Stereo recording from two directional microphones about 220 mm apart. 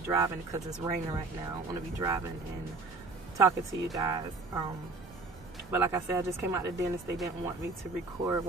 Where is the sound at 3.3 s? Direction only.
15° right (ahead or behind).